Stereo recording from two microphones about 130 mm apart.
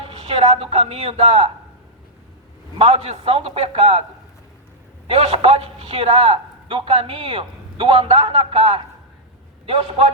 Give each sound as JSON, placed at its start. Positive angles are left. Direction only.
{"t": 0.0, "sound": "a woman's voice", "side_deg": -45}
{"t": 2.7, "sound": "a man's voice", "side_deg": -45}
{"t": 5.0, "sound": "a man's voice", "side_deg": -45}